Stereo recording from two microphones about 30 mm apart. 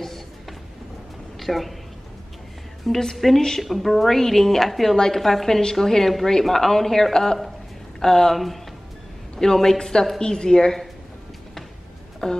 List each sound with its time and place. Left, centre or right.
0.0 s music: centre
1.4 s a woman's voice: centre
2.9 s a woman's voice: centre
3.3 s a woman's voice: centre
3.6 s a woman's voice: centre
4.9 s a woman's voice: left
5.2 s a woman's voice: centre
9.4 s a woman's voice: centre
12.2 s a woman's voice: left